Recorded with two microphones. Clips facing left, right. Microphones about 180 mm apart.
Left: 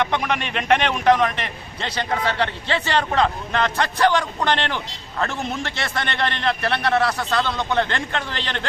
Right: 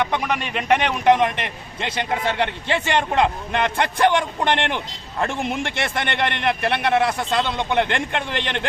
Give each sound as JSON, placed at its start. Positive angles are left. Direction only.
{"t": 0.0, "sound": "a man's voice", "side_deg": -10}
{"t": 5.8, "sound": "a man's voice", "side_deg": -20}